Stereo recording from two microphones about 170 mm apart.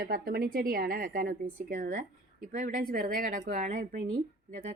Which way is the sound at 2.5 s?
45° right (ahead or behind).